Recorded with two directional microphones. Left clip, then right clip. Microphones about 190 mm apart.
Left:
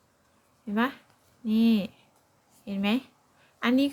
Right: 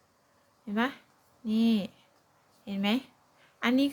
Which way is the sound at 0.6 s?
15° left (ahead or behind).